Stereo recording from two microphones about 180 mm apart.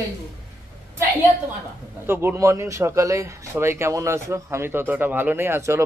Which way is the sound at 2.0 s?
10° right (ahead or behind).